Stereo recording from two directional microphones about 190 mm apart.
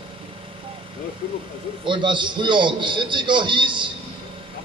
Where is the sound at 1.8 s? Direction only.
25° right (ahead or behind).